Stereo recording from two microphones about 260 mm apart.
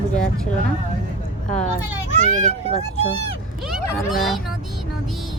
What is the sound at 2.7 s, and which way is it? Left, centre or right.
Speech, left.